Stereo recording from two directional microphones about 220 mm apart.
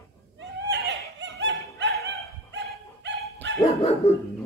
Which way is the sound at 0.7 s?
55° right (ahead or behind).